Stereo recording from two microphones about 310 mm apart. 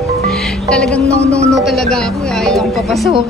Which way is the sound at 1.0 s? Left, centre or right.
Centre.